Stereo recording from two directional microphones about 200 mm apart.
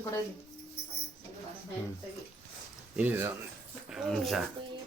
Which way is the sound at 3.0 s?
10° right (ahead or behind).